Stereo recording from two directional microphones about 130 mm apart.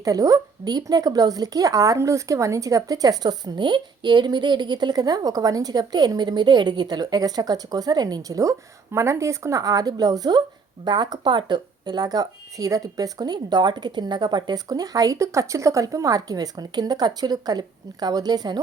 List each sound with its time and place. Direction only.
0.0 s a woman's voice: 25° right (ahead or behind)